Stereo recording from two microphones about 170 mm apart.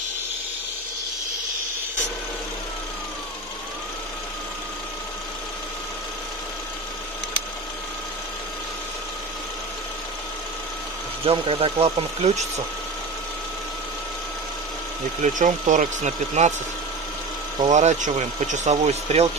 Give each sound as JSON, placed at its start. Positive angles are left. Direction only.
{"t": 11.2, "sound": "speech", "side_deg": -35}
{"t": 15.2, "sound": "speech", "side_deg": -45}
{"t": 17.6, "sound": "speech", "side_deg": -45}